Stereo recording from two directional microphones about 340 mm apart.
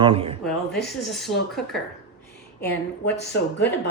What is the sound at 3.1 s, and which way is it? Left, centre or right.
Speech, left.